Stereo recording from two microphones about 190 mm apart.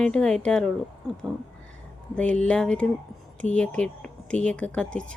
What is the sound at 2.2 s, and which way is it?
A woman's voice, 5° left (ahead or behind).